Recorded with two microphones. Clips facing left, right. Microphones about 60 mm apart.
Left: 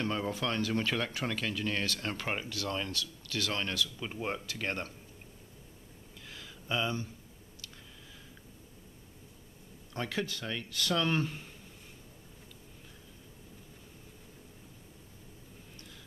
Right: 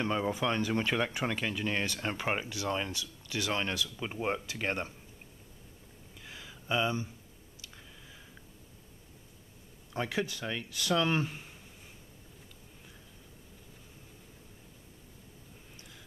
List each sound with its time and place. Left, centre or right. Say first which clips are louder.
0.0 s speech: right 2 dB; centre
6.2 s a sound: right 2 dB; centre
9.9 s speech: right 2 dB; centre